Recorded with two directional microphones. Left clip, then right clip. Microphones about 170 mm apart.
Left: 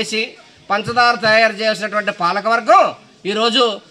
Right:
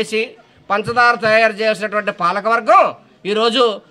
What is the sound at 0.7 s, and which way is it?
A man's voice, 20° right (ahead or behind).